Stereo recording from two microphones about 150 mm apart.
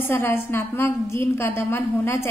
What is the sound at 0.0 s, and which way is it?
A woman's voice, 15° left (ahead or behind).